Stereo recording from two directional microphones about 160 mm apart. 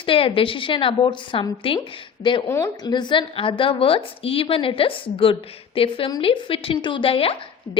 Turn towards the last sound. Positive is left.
turn(degrees=35)  # may be behind; listen again after turning